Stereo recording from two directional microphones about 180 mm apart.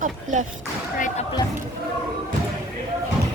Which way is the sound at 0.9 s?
45° left (ahead or behind).